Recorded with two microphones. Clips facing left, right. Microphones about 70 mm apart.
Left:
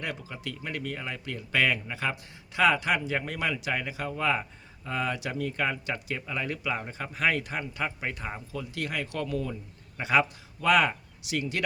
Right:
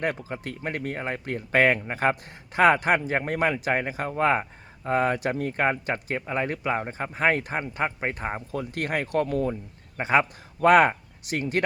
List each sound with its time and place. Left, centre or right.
0.0 s speech: right